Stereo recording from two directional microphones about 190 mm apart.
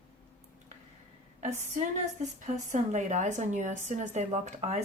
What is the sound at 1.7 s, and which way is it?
Speech, 40° right (ahead or behind).